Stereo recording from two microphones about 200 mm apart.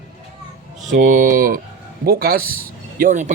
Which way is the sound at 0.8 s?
40° right (ahead or behind).